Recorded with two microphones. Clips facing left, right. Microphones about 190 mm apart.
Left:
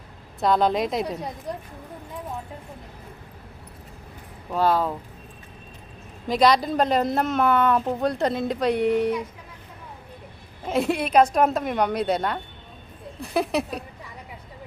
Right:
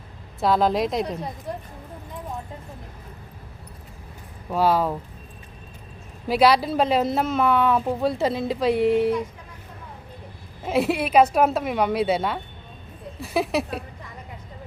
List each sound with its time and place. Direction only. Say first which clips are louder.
0.3 s a woman's voice: even; centre (ahead or behind)
4.5 s speech: right 1 dB; 10° right (ahead or behind)
6.2 s a woman's voice: right 1 dB; 5° right (ahead or behind)
10.7 s a woman's voice: right 1 dB; 5° right (ahead or behind)